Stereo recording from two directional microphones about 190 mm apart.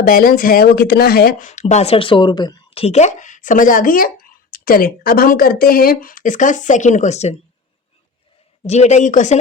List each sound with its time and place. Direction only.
0.0 s speech: 50° left (ahead or behind)
8.6 s speech: 35° left (ahead or behind)